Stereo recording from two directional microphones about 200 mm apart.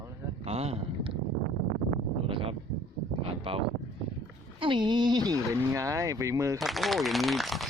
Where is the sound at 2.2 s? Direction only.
25° right (ahead or behind).